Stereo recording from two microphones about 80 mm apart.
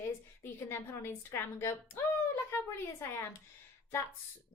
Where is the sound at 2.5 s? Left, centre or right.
Left.